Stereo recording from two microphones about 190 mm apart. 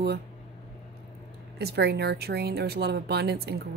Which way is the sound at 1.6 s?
60° right (ahead or behind).